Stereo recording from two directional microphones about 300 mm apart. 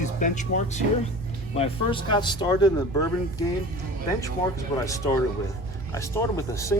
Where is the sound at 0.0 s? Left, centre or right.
Left.